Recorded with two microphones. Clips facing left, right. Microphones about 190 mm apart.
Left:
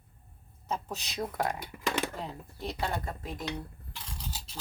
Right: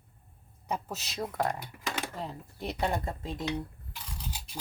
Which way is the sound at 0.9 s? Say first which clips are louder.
Even; centre (ahead or behind).